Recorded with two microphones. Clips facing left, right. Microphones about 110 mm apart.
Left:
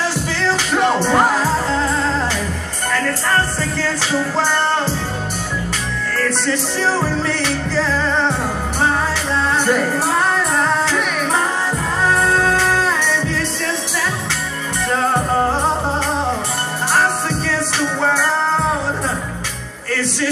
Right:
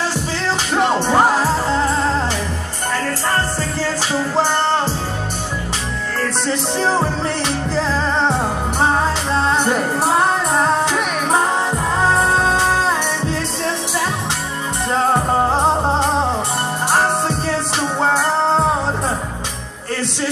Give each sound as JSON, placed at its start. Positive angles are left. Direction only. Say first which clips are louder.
{"t": 0.8, "sound": "music", "louder": "even", "side_deg": -20}
{"t": 6.1, "sound": "music", "louder": "left 1 dB", "side_deg": -20}
{"t": 15.5, "sound": "music", "louder": "right 2 dB", "side_deg": -20}